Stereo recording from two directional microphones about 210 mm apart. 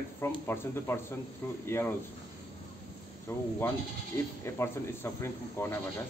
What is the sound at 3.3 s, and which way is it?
Speech, 15° left (ahead or behind).